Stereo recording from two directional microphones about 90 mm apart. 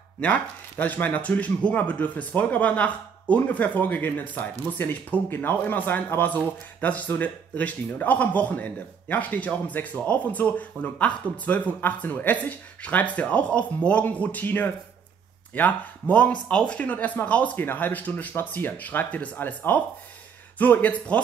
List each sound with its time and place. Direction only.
0.2 s speech: 20° left (ahead or behind)